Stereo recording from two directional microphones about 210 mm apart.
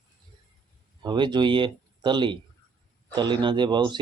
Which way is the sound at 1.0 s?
20° right (ahead or behind).